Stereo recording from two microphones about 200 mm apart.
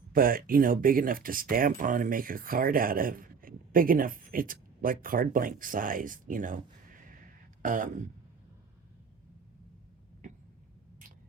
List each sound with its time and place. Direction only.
0.1 s speech: 45° right (ahead or behind)
7.6 s speech: 40° right (ahead or behind)